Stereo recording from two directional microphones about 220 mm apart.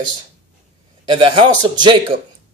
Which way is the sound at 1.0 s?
25° right (ahead or behind).